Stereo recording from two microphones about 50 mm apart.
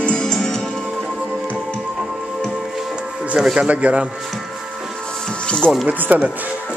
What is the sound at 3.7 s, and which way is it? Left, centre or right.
Speech, right.